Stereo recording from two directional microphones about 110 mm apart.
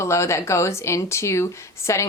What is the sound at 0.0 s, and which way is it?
Speech, 25° left (ahead or behind).